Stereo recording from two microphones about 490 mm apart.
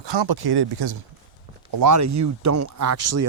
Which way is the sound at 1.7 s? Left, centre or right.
Right.